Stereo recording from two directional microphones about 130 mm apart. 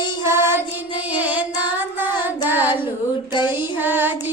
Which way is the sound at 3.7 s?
15° right (ahead or behind).